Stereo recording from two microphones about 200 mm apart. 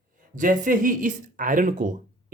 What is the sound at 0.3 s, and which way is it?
Speech, 40° right (ahead or behind).